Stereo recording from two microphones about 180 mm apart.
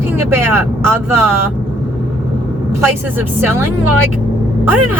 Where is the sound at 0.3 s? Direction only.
15° right (ahead or behind).